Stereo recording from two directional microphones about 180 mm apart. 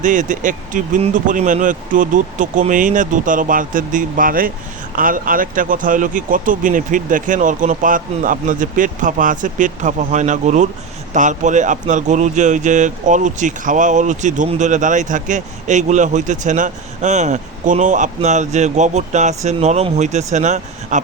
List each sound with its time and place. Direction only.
0.0 s speech: 45° right (ahead or behind)